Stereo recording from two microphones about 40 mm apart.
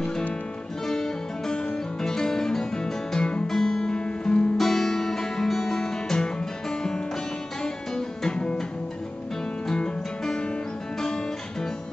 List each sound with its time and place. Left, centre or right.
0.8 s guitar: centre
3.4 s guitar: centre
4.6 s music: centre
9.7 s music: centre